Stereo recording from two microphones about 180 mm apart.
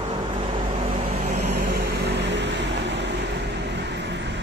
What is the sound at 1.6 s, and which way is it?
Vehicle, 65° right (ahead or behind).